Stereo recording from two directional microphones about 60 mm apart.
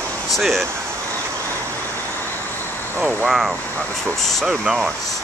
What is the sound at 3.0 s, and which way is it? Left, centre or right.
Speech, right.